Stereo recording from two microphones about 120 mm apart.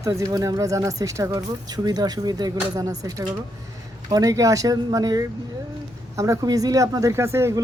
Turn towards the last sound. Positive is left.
turn(degrees=-20)  # may be behind; listen again after turning